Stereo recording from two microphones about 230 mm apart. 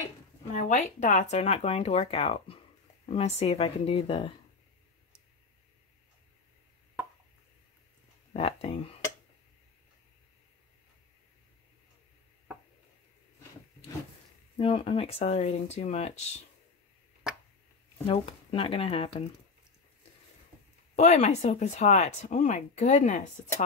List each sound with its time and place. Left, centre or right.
0.6 s speech: left
8.3 s speech: left
14.6 s speech: left
18.0 s speech: left
20.9 s speech: left